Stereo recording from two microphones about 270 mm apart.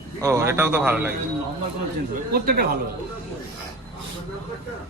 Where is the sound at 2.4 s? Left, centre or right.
Right.